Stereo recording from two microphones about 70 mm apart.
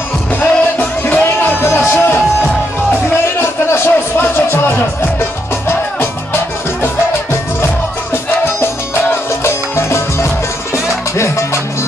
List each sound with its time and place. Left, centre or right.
0.4 s music: left
7.6 s music: left